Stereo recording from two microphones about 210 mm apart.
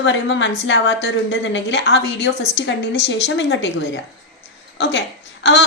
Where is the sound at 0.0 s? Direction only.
60° left (ahead or behind).